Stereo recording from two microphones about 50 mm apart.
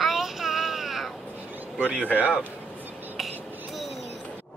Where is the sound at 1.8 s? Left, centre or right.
Right.